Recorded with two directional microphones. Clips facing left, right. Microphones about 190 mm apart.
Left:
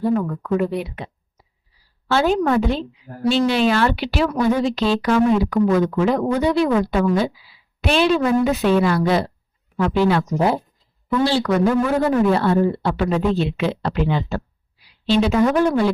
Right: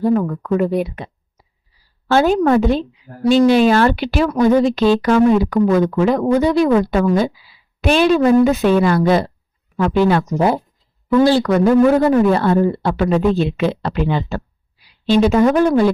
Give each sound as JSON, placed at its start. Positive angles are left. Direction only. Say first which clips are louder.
{"t": 0.0, "sound": "speech", "louder": "right 4 dB", "side_deg": -45}
{"t": 2.0, "sound": "speech", "louder": "right 4 dB", "side_deg": -45}